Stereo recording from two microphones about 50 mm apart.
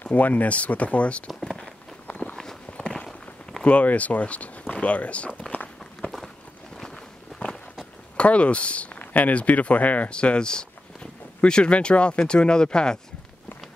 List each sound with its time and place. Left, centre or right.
0.0 s speech: left
1.2 s a sound: centre
2.0 s walk: left
3.6 s speech: left
5.9 s walk: centre
8.2 s speech: left